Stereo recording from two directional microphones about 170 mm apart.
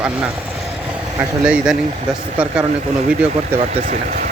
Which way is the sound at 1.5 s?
5° right (ahead or behind).